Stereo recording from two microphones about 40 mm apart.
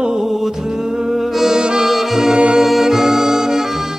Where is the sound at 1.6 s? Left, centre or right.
Right.